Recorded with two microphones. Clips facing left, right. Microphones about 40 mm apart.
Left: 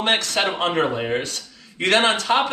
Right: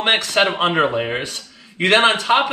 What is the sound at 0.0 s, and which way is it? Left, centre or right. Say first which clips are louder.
Speech: right 4 dB; centre.